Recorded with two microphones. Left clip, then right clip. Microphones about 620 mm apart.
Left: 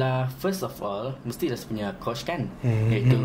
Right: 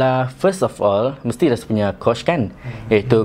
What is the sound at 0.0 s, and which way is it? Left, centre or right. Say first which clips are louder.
Speech: right 11 dB; right.